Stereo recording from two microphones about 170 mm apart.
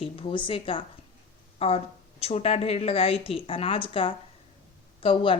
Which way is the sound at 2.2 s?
35° left (ahead or behind).